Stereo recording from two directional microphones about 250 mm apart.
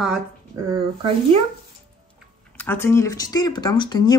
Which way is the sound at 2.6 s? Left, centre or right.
Centre.